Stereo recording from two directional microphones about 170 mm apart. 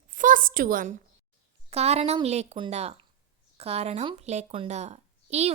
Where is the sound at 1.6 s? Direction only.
40° right (ahead or behind).